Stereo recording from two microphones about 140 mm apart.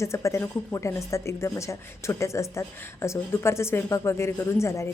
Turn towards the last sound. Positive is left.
turn(degrees=20)  # may be behind; listen again after turning